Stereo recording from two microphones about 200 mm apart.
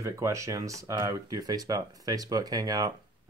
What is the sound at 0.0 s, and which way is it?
Speech, 15° right (ahead or behind).